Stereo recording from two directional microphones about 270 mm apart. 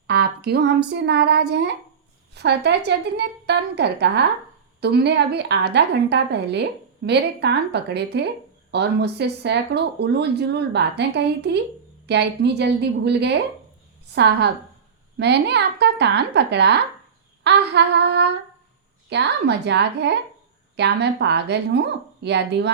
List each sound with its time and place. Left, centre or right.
0.1 s a woman's voice: right